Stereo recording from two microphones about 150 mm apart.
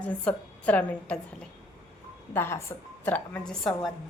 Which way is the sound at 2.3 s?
15° left (ahead or behind).